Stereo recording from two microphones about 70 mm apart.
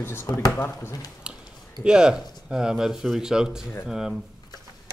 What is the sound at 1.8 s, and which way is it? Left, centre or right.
Speech, centre.